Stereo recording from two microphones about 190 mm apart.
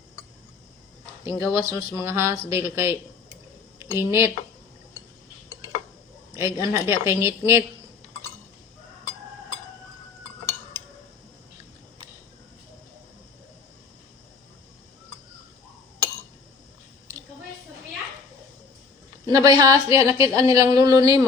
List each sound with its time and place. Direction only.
1.4 s a woman's voice: 15° right (ahead or behind)
6.3 s a woman's voice: 15° right (ahead or behind)
10.8 s a sound: 10° left (ahead or behind)
19.3 s a woman's voice: 20° right (ahead or behind)